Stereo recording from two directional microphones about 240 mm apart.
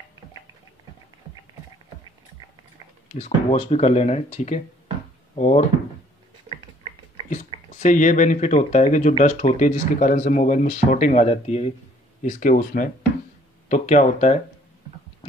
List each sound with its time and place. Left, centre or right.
3.1 s speech: left
7.2 s speech: left